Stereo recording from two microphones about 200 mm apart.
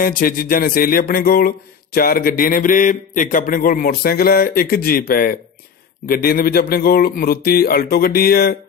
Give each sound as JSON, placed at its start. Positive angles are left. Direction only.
{"t": 0.0, "sound": "a man's voice", "side_deg": 45}